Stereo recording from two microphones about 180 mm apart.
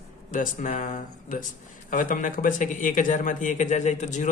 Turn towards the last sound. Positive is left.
turn(degrees=40)  # may be behind; listen again after turning